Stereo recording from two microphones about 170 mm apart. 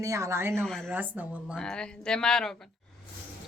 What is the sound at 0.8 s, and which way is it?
Speech, 10° right (ahead or behind).